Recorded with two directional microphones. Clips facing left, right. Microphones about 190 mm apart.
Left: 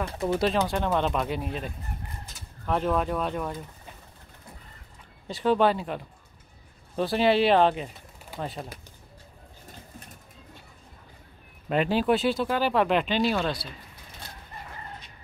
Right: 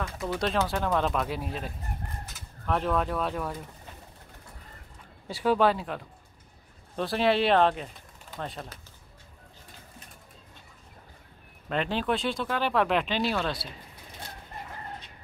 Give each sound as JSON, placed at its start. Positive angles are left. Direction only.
{"t": 0.7, "sound": "speech", "side_deg": 0}
{"t": 5.3, "sound": "speech", "side_deg": -10}
{"t": 11.7, "sound": "speech", "side_deg": 5}